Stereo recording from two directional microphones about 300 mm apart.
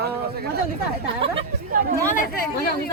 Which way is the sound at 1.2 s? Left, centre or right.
Centre.